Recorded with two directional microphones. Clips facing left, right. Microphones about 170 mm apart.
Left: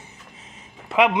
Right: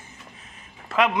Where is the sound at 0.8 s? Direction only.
20° left (ahead or behind).